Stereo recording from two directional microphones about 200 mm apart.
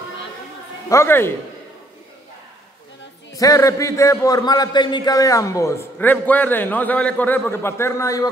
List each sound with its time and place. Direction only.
0.8 s a man's voice: 15° left (ahead or behind)
3.3 s a man's voice: 15° left (ahead or behind)